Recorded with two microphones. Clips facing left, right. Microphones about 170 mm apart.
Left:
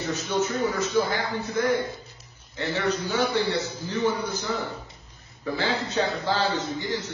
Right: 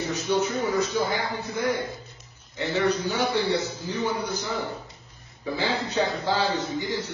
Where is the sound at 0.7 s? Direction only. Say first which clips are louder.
Even; 15° right (ahead or behind).